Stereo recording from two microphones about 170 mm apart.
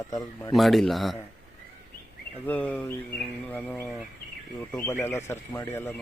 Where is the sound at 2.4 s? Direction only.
10° left (ahead or behind).